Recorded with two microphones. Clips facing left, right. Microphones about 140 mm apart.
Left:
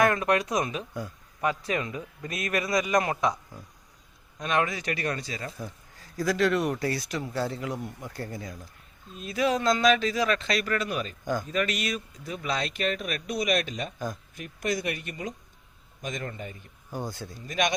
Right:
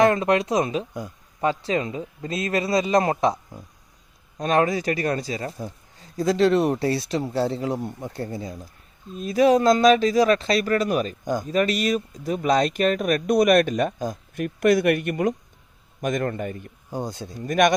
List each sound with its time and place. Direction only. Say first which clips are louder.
0.0 s speech: right 5 dB; 25° right (ahead or behind)
9.1 s speech: right 9 dB; 40° right (ahead or behind)
16.9 s speech: right 5 dB; 20° right (ahead or behind)
17.3 s speech: right 9 dB; 55° right (ahead or behind)